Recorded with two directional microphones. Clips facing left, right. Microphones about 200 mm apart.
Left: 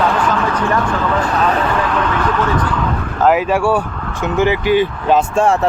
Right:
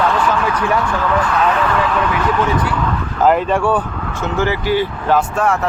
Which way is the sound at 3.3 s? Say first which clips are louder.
Left 1 dB; 5° left (ahead or behind).